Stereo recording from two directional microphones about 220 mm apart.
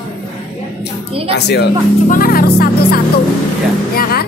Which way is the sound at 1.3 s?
50° left (ahead or behind).